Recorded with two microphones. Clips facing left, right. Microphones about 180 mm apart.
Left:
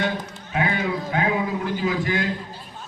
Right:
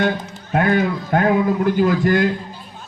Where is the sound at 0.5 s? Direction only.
50° right (ahead or behind).